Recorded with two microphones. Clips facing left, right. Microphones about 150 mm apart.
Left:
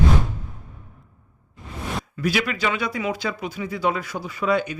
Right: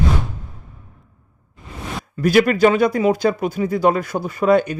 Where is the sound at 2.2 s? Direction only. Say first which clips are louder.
Right 11 dB; 45° right (ahead or behind).